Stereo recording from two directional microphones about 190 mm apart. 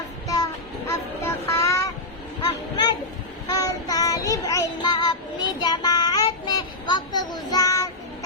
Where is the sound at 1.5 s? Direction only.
15° left (ahead or behind).